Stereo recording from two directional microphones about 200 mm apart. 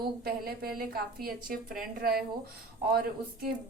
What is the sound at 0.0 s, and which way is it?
Speech, 50° right (ahead or behind).